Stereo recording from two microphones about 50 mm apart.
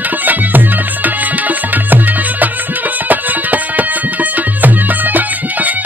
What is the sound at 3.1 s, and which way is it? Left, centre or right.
Music, right.